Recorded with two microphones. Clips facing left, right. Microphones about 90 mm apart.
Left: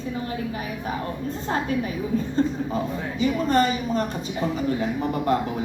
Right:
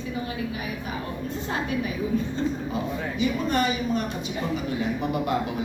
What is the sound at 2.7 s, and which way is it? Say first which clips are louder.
A woman's voice: left 2 dB; 40° left (ahead or behind).